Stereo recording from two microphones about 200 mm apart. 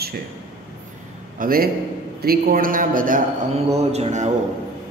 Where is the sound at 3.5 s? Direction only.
30° right (ahead or behind).